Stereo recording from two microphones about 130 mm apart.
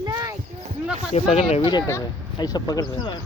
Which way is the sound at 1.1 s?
55° left (ahead or behind).